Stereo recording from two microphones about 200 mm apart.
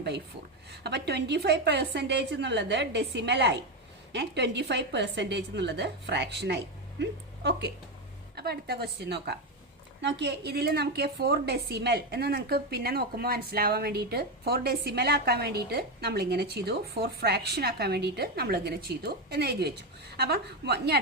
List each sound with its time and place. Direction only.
0.9 s a woman's voice: 55° right (ahead or behind)